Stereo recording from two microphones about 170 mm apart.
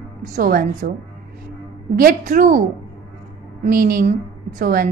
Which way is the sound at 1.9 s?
55° right (ahead or behind).